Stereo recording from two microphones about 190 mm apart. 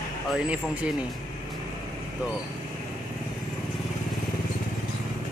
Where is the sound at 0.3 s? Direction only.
5° right (ahead or behind).